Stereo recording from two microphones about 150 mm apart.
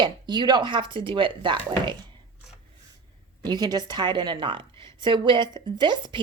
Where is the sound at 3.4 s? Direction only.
25° right (ahead or behind).